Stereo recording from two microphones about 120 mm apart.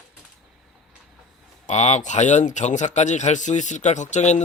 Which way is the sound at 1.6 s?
70° left (ahead or behind).